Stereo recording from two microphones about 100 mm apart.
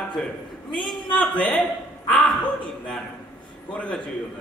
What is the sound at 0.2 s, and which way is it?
Speech, 5° left (ahead or behind).